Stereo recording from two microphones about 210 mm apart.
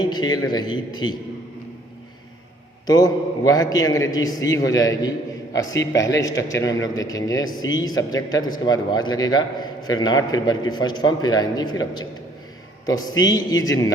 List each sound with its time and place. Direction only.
0.0 s speech: 20° left (ahead or behind)
2.8 s a man's voice: 20° left (ahead or behind)
5.5 s a man's voice: 60° left (ahead or behind)
5.9 s a man's voice: 15° left (ahead or behind)
12.8 s a man's voice: 15° left (ahead or behind)